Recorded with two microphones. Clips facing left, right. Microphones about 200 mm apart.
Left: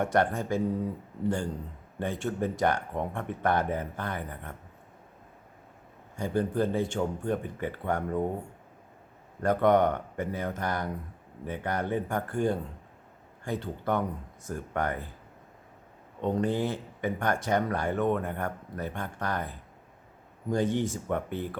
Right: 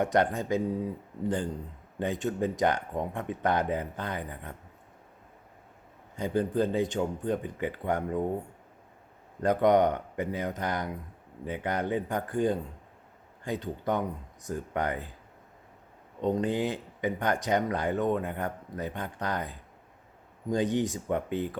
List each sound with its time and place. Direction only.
0.0 s speech: 20° right (ahead or behind)
2.0 s speech: 15° right (ahead or behind)
6.1 s speech: 20° right (ahead or behind)
9.4 s speech: 20° right (ahead or behind)
16.2 s speech: 15° right (ahead or behind)